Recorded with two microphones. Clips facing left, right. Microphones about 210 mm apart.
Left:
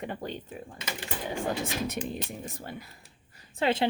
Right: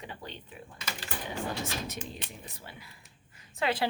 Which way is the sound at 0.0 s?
50° left (ahead or behind).